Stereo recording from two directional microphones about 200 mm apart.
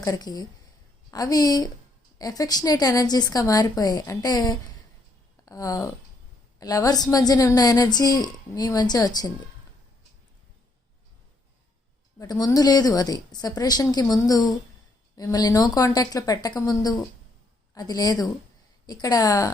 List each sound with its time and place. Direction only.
0.0 s a woman's voice: 20° left (ahead or behind)
12.2 s a woman's voice: 15° left (ahead or behind)